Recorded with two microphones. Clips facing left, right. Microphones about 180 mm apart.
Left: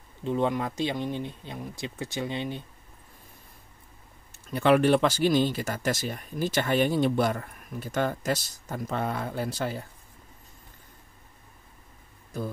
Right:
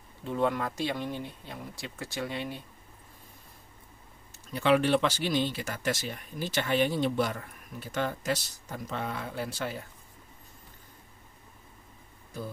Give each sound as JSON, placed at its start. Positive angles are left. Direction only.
{"t": 0.2, "sound": "speech", "side_deg": 20}
{"t": 4.6, "sound": "speech", "side_deg": 50}